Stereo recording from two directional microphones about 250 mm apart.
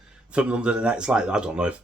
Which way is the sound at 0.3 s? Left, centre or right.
Centre.